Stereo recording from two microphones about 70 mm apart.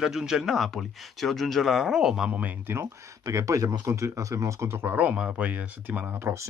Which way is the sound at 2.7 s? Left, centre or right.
Right.